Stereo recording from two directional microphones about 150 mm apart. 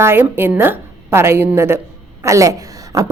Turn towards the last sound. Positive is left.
turn(degrees=-20)  # may be behind; listen again after turning